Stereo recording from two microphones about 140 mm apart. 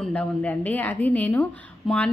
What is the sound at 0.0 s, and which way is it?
A woman's voice, 10° left (ahead or behind).